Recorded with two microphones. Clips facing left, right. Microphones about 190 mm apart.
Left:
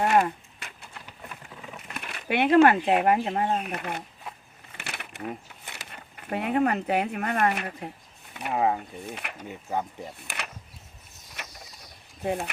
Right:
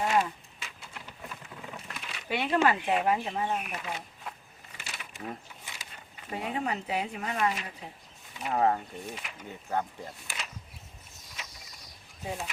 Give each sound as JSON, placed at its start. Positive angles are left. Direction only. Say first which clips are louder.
{"t": 0.0, "sound": "a sound", "louder": "left 5 dB", "side_deg": 60}
{"t": 1.9, "sound": "speech", "louder": "left 5 dB", "side_deg": 60}
{"t": 4.8, "sound": "a sound", "louder": "left 5 dB", "side_deg": 60}
{"t": 5.7, "sound": "speech", "louder": "left 4 dB", "side_deg": 60}
{"t": 8.5, "sound": "speech", "louder": "left 1 dB", "side_deg": 10}
{"t": 9.0, "sound": "speech", "louder": "left 3 dB", "side_deg": 60}
{"t": 9.5, "sound": "speech", "louder": "left 1 dB", "side_deg": 15}
{"t": 10.2, "sound": "a sound", "louder": "left 4 dB", "side_deg": 60}
{"t": 12.2, "sound": "speech", "louder": "left 8 dB", "side_deg": 60}